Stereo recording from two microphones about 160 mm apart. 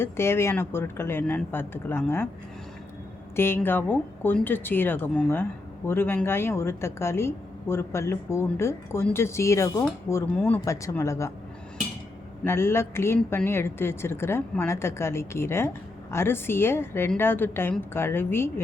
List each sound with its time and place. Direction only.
0.0 s speech: 15° left (ahead or behind)
3.3 s speech: 15° left (ahead or behind)
12.5 s speech: 15° left (ahead or behind)